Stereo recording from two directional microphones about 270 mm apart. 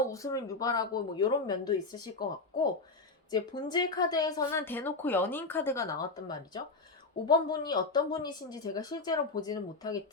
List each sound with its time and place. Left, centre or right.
0.1 s speech: centre